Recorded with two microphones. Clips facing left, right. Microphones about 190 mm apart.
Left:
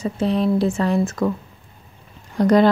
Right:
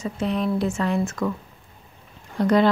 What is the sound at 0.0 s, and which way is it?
Speech, 35° left (ahead or behind).